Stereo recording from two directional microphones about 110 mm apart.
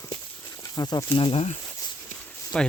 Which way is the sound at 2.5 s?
5° left (ahead or behind).